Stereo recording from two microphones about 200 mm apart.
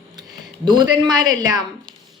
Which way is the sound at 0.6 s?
20° right (ahead or behind).